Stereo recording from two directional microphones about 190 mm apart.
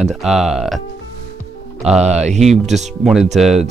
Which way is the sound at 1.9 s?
35° right (ahead or behind).